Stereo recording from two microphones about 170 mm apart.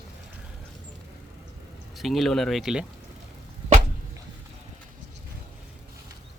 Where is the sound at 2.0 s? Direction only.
Centre (ahead or behind).